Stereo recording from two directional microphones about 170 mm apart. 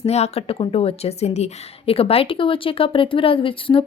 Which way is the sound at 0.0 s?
40° left (ahead or behind).